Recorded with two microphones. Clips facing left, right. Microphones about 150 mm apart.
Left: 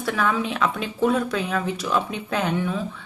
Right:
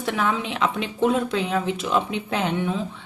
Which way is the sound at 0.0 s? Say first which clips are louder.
Left 1 dB; 20° right (ahead or behind).